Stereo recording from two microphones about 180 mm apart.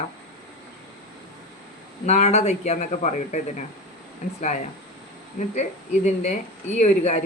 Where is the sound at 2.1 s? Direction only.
40° left (ahead or behind).